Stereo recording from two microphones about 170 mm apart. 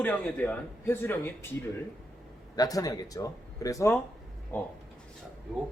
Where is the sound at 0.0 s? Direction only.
10° left (ahead or behind).